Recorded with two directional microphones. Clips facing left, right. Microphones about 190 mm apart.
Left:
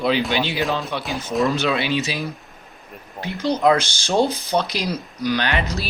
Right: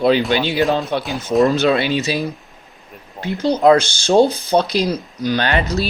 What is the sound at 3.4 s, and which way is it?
Speech, 30° right (ahead or behind).